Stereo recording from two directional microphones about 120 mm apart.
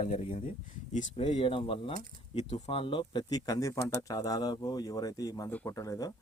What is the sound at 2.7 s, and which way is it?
Speech, 45° left (ahead or behind).